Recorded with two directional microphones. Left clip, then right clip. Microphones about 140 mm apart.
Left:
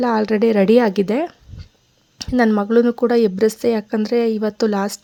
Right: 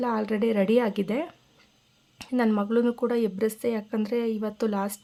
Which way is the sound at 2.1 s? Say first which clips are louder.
Left 9 dB; 40° left (ahead or behind).